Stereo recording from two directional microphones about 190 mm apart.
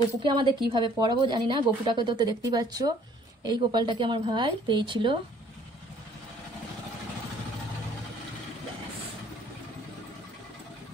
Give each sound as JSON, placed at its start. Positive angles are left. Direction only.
{"t": 0.2, "sound": "a woman's voice", "side_deg": -25}